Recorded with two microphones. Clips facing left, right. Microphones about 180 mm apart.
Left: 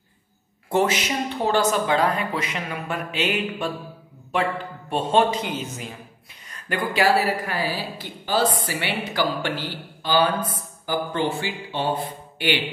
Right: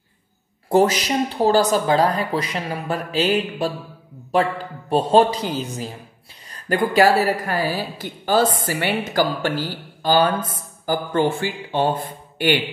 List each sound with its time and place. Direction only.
0.7 s a woman's voice: 35° right (ahead or behind)